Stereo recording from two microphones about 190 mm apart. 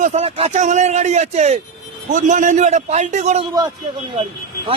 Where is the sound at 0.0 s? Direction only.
35° right (ahead or behind).